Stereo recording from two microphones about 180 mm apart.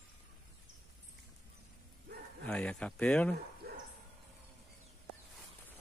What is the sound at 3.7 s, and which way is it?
Bow-wow, 60° right (ahead or behind).